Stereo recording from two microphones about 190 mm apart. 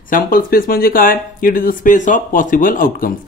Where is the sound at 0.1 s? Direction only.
50° left (ahead or behind).